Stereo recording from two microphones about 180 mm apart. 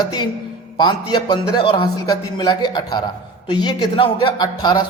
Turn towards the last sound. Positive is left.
turn(degrees=25)  # may be behind; listen again after turning